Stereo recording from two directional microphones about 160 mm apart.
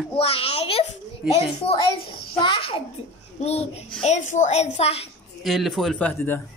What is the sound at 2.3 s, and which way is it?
A child's voice, 30° left (ahead or behind).